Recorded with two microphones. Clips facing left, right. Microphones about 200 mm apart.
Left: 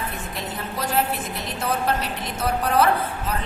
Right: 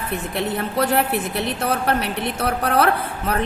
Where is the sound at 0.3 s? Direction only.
65° right (ahead or behind).